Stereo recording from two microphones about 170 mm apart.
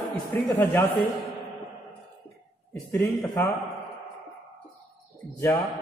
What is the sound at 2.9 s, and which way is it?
Speech, 15° left (ahead or behind).